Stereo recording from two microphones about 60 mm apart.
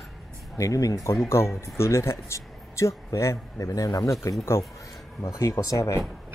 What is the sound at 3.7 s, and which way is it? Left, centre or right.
Speech, left.